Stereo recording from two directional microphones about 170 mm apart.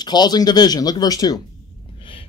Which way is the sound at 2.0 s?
30° left (ahead or behind).